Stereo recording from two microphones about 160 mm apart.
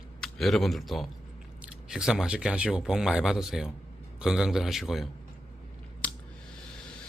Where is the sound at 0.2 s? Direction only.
Centre (ahead or behind).